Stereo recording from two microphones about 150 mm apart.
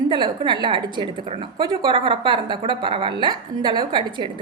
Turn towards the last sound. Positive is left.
turn(degrees=-30)  # may be behind; listen again after turning